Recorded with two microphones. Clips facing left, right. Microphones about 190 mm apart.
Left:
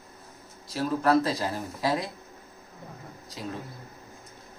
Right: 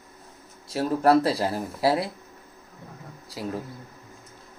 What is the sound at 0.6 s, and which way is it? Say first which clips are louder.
Speech: right 4 dB; 30° right (ahead or behind).